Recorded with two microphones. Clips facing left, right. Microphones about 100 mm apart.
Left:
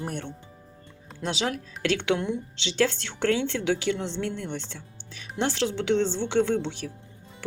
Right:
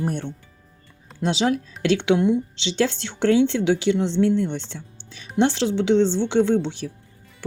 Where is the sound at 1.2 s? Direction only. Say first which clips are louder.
Right 7 dB; 20° right (ahead or behind).